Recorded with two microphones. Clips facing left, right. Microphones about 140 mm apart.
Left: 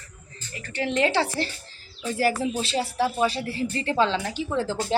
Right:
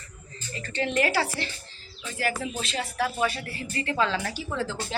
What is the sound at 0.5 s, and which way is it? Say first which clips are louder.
Speech: even; 15° left (ahead or behind).